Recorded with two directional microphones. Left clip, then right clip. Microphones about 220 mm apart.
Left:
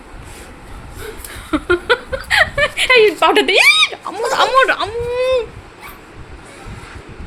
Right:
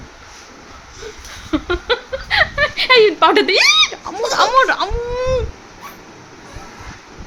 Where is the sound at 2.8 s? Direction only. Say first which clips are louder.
Even; 10° right (ahead or behind).